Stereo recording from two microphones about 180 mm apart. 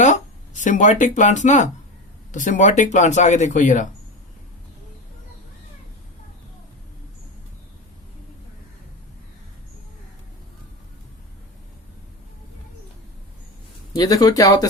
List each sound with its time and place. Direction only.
0.0 s speech: 45° left (ahead or behind)
13.9 s speech: 20° left (ahead or behind)